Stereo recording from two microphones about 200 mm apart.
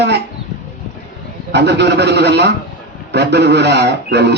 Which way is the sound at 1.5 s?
55° right (ahead or behind).